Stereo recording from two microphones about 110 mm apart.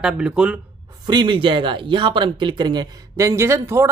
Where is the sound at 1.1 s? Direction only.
45° right (ahead or behind).